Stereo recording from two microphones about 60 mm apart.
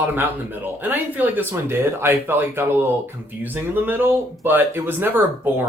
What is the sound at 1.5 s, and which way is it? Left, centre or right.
Speech, right.